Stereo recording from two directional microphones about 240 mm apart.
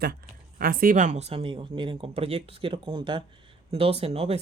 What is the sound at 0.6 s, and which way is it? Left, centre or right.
Speech, right.